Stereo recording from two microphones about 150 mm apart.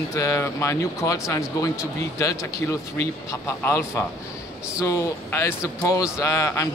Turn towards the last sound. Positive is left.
turn(degrees=20)  # may be behind; listen again after turning